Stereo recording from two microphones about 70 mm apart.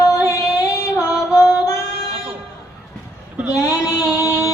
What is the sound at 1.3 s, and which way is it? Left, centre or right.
Music, left.